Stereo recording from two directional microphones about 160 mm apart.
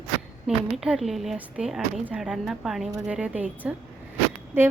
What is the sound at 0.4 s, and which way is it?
A woman's voice, centre (ahead or behind).